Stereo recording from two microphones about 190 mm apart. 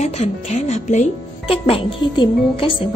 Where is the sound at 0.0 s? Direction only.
35° left (ahead or behind).